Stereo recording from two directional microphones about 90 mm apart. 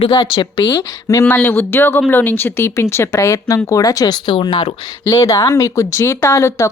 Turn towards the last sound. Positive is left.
turn(degrees=35)  # may be behind; listen again after turning